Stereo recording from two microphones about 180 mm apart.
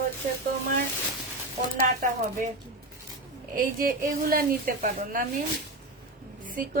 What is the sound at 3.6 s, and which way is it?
A woman's voice, 50° right (ahead or behind).